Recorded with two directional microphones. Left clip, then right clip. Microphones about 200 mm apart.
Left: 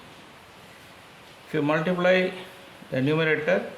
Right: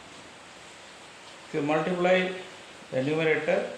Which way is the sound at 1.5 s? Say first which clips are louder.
Left 2 dB; 45° left (ahead or behind).